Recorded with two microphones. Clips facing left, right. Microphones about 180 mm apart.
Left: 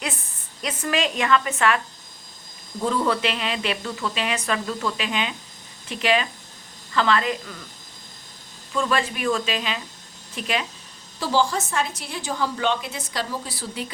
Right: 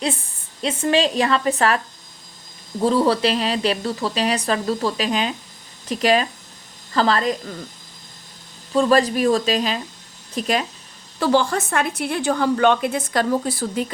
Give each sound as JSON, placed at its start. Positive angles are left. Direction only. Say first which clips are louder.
{"t": 0.0, "sound": "speech", "louder": "right 7 dB", "side_deg": -30}
{"t": 2.8, "sound": "speech", "louder": "right 5 dB", "side_deg": -35}
{"t": 8.7, "sound": "speech", "louder": "right 8 dB", "side_deg": -35}
{"t": 11.2, "sound": "a woman's voice", "louder": "right 4 dB", "side_deg": -60}